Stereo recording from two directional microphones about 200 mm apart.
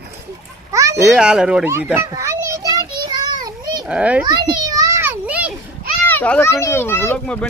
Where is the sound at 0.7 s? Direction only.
15° right (ahead or behind).